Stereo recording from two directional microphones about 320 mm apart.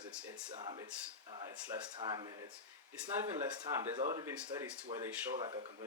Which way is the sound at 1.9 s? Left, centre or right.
Centre.